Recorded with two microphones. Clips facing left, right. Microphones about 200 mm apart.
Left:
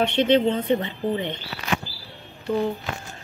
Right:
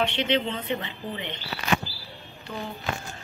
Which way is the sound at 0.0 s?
50° left (ahead or behind).